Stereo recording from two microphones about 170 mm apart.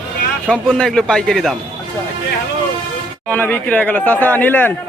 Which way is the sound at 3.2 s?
10° left (ahead or behind).